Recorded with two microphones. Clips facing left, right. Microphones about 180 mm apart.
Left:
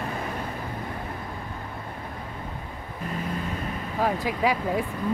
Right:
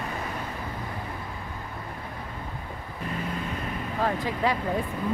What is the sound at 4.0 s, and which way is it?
Speech, 10° left (ahead or behind).